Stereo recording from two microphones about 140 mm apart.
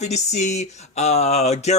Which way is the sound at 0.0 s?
55° left (ahead or behind).